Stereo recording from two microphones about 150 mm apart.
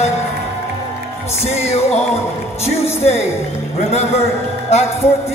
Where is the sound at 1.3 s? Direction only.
45° left (ahead or behind).